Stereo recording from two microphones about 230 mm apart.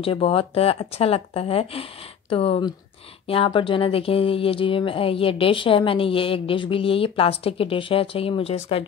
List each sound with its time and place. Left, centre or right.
0.0 s speech: left